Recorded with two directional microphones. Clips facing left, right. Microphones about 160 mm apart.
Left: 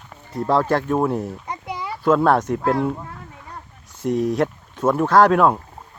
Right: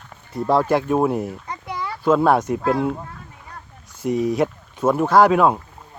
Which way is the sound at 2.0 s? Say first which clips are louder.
Even; 5° right (ahead or behind).